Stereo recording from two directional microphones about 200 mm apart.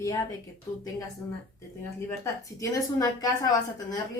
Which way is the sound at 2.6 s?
20° left (ahead or behind).